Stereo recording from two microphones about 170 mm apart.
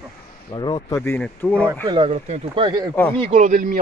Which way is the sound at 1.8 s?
30° right (ahead or behind).